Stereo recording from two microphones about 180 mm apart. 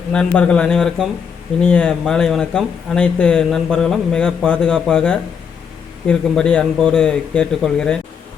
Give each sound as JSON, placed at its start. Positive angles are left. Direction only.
{"t": 0.1, "sound": "speech", "side_deg": 5}